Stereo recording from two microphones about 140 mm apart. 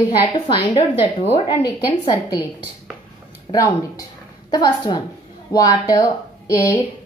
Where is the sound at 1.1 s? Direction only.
45° left (ahead or behind).